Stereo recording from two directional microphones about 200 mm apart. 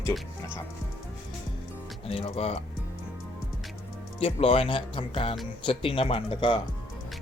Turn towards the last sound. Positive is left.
turn(degrees=25)  # may be behind; listen again after turning